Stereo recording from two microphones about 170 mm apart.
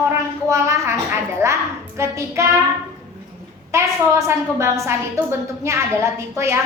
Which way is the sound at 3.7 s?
15° right (ahead or behind).